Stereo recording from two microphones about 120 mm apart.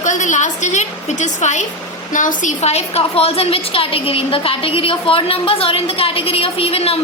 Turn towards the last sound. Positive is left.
turn(degrees=55)  # may be behind; listen again after turning